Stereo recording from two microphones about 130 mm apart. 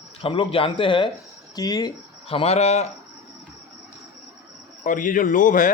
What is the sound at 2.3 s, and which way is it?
Speech, 50° left (ahead or behind).